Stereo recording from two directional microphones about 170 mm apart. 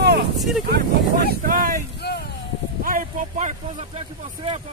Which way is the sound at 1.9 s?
70° left (ahead or behind).